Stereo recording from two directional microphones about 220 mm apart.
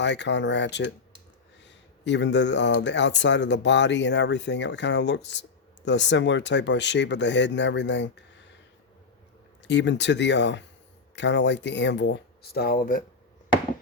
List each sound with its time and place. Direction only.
0.0 s speech: 50° left (ahead or behind)
9.6 s speech: 55° left (ahead or behind)